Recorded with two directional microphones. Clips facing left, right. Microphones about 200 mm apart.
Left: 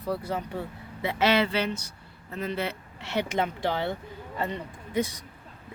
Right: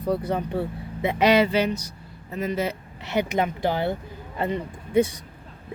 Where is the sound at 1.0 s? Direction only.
15° right (ahead or behind).